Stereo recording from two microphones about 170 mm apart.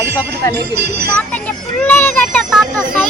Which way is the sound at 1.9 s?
10° left (ahead or behind).